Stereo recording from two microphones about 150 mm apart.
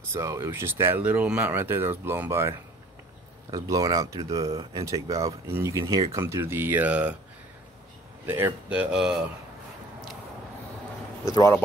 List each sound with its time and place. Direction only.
0.1 s speech: 20° right (ahead or behind)
3.5 s speech: 25° right (ahead or behind)
8.3 s speech: 15° right (ahead or behind)